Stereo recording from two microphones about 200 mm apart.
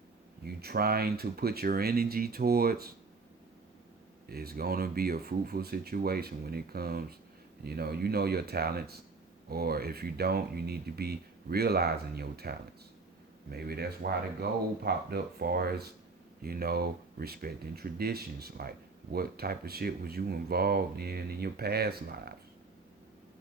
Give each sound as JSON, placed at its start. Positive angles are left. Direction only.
{"t": 0.4, "sound": "speech", "side_deg": -50}
{"t": 4.3, "sound": "speech", "side_deg": -50}